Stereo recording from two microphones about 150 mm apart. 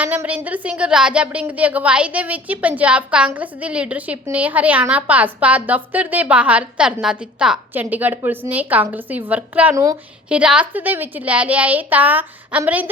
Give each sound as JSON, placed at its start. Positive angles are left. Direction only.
{"t": 0.0, "sound": "speech", "side_deg": -10}
{"t": 9.7, "sound": "a woman's voice", "side_deg": -25}
{"t": 10.2, "sound": "speech", "side_deg": -5}